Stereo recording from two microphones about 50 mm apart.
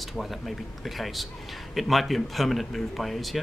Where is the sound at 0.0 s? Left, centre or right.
Centre.